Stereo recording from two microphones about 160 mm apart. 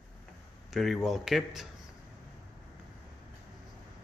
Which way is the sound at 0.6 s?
Centre (ahead or behind).